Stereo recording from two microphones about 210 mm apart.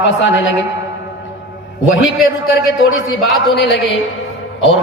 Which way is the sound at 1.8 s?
65° left (ahead or behind).